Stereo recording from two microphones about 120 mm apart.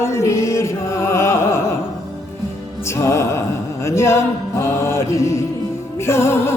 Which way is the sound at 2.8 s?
25° left (ahead or behind).